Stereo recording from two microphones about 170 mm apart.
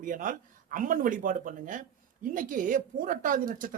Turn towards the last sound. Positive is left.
turn(degrees=-50)  # may be behind; listen again after turning